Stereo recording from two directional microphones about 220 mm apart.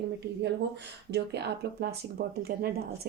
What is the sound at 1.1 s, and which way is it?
Speech, 50° right (ahead or behind).